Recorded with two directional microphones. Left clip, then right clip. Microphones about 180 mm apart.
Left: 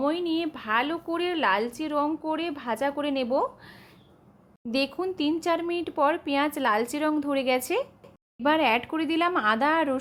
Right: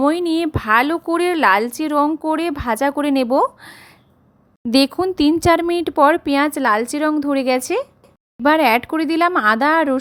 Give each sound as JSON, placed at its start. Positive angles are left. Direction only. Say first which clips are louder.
{"t": 0.0, "sound": "speech", "louder": "right 9 dB", "side_deg": -40}